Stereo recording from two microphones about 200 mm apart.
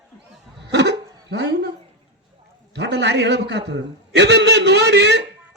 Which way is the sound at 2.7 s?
60° right (ahead or behind).